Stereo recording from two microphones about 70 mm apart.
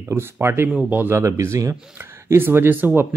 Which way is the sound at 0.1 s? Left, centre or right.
Right.